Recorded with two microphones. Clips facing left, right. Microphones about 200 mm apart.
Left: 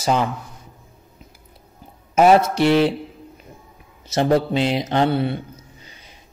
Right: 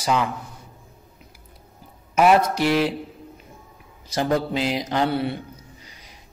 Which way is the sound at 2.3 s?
25° left (ahead or behind).